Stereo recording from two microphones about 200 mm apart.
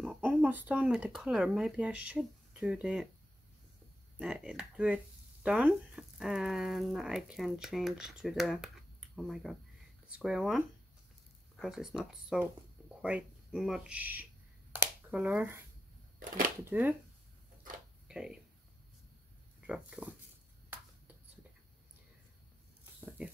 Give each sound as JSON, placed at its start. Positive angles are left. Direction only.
{"t": 0.0, "sound": "speech", "side_deg": -5}
{"t": 4.2, "sound": "speech", "side_deg": -5}
{"t": 14.8, "sound": "a sound", "side_deg": -5}
{"t": 16.2, "sound": "speech", "side_deg": -45}
{"t": 16.6, "sound": "speech", "side_deg": -10}
{"t": 18.0, "sound": "speech", "side_deg": -5}
{"t": 19.6, "sound": "speech", "side_deg": -5}
{"t": 22.9, "sound": "a sound", "side_deg": -5}